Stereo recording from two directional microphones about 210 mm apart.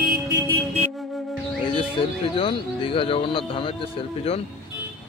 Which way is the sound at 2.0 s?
25° left (ahead or behind).